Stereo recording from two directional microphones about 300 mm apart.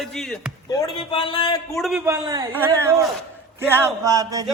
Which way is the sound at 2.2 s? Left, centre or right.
Centre.